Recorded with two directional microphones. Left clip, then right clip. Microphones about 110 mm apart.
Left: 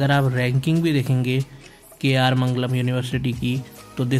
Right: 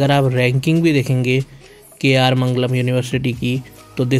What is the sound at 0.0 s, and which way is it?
Speech, 45° right (ahead or behind).